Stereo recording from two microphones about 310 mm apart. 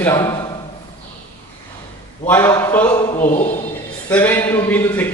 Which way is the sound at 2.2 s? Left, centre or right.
Centre.